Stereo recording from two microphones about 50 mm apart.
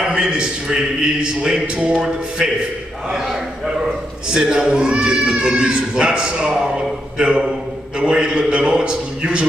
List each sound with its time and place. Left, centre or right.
0.1 s a man's voice: centre